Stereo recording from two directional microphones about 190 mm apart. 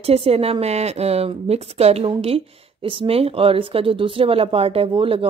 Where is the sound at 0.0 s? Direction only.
30° right (ahead or behind).